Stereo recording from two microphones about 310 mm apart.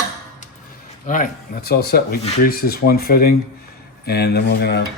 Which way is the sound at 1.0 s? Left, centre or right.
Left.